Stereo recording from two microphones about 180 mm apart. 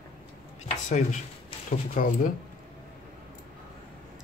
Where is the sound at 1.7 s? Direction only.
50° left (ahead or behind).